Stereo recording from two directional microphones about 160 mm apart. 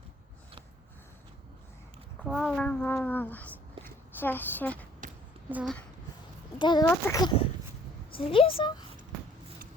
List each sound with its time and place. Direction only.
2.2 s a woman's voice: centre (ahead or behind)
5.5 s speech: 10° right (ahead or behind)
6.6 s a child's voice: 30° left (ahead or behind)
6.8 s a woman's voice: 15° left (ahead or behind)
8.1 s a woman's voice: 35° left (ahead or behind)